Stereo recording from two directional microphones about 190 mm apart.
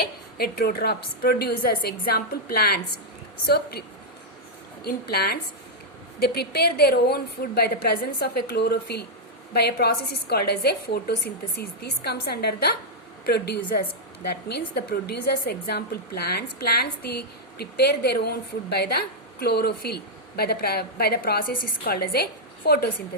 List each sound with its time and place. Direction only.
0.3 s a woman's voice: 55° left (ahead or behind)